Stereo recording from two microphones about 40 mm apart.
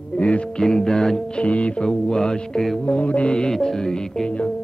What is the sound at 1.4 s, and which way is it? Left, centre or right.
Music, left.